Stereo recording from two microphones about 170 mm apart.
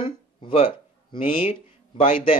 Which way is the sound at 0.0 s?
30° left (ahead or behind).